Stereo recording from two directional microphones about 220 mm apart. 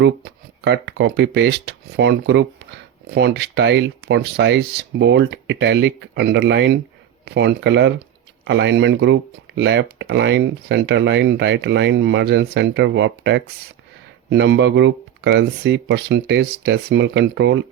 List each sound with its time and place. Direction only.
0.0 s speech: 50° right (ahead or behind)